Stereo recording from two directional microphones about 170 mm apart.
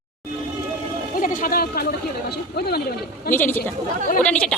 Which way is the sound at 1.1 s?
50° left (ahead or behind).